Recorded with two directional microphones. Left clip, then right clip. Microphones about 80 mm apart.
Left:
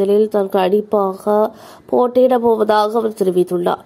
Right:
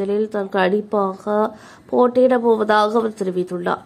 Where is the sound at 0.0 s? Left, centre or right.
Left.